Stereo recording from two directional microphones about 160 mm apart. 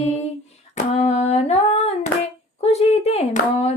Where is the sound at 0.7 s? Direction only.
45° left (ahead or behind).